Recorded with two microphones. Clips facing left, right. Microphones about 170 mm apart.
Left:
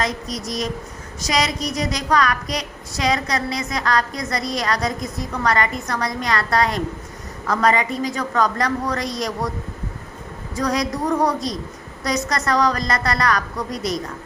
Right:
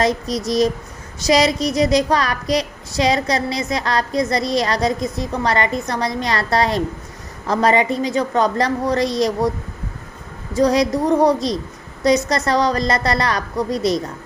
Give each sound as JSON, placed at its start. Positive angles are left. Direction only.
{"t": 0.0, "sound": "a woman's voice", "side_deg": -30}
{"t": 10.5, "sound": "a woman's voice", "side_deg": -25}